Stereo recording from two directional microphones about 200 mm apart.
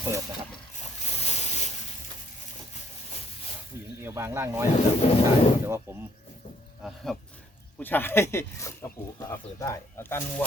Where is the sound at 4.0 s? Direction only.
10° right (ahead or behind).